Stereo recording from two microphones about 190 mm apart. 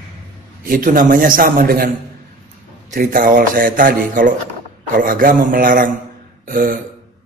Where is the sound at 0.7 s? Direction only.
45° right (ahead or behind).